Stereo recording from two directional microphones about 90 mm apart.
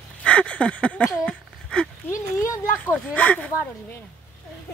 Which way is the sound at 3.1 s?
15° left (ahead or behind).